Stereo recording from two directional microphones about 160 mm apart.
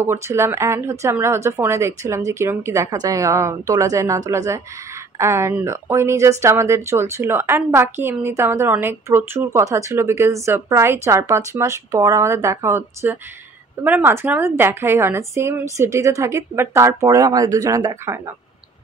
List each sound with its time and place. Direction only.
0.0 s a woman's voice: 15° right (ahead or behind)